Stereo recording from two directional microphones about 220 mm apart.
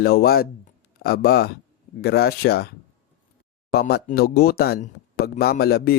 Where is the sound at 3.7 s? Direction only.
40° left (ahead or behind).